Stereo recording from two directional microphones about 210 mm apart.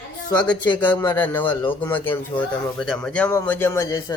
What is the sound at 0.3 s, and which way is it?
A man's voice, 5° left (ahead or behind).